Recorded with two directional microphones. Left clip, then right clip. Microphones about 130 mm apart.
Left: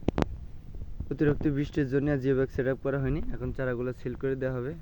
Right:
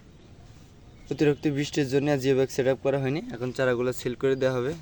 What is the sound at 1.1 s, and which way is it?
Speech, 15° right (ahead or behind).